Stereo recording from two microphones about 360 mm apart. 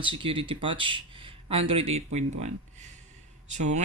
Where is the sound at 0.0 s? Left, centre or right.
Centre.